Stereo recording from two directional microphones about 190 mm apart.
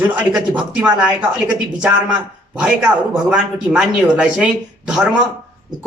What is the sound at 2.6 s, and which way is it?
Speech, 5° right (ahead or behind).